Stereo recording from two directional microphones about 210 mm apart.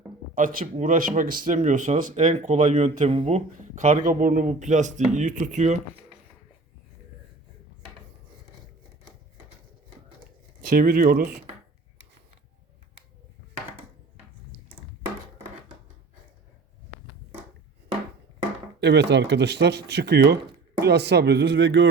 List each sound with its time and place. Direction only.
0.3 s speech: 40° right (ahead or behind)
10.8 s speech: 40° right (ahead or behind)
18.8 s speech: 55° right (ahead or behind)